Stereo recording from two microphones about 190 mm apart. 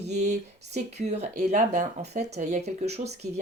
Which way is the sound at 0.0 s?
35° right (ahead or behind).